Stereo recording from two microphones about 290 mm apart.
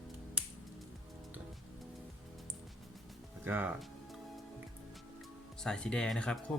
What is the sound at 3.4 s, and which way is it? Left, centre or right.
Music, centre.